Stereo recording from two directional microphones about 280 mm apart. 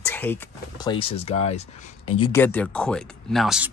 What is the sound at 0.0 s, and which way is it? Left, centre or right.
Speech, centre.